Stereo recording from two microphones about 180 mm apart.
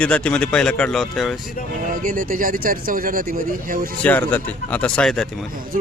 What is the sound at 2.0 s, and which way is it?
Speech, 50° right (ahead or behind).